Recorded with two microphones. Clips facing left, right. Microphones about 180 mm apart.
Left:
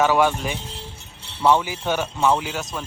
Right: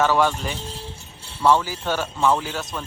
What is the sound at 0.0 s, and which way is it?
Speech, 15° left (ahead or behind).